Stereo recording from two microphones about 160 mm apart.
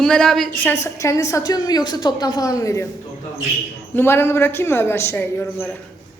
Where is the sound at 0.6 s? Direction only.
15° left (ahead or behind).